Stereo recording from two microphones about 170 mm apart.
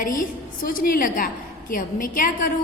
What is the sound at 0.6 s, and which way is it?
A woman's voice, 55° left (ahead or behind).